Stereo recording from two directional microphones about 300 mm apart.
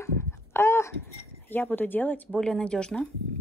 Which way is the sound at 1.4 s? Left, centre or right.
Centre.